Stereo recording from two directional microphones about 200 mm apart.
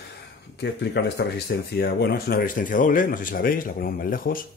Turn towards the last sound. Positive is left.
turn(degrees=45)  # may be behind; listen again after turning